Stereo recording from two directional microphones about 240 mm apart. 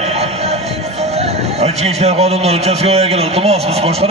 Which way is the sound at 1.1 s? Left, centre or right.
Right.